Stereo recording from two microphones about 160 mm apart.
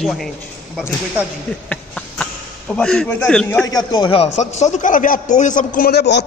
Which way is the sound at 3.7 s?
25° left (ahead or behind).